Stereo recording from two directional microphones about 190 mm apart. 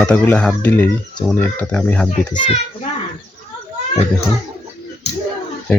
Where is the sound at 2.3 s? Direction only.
25° left (ahead or behind).